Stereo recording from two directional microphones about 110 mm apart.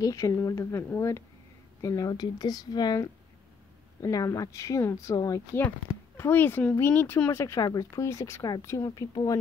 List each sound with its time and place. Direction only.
0.0 s speech: 30° left (ahead or behind)
6.1 s speech: 20° left (ahead or behind); by 9.4 s 35° left (ahead or behind)